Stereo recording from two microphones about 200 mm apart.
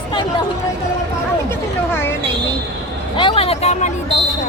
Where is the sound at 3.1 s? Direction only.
25° left (ahead or behind).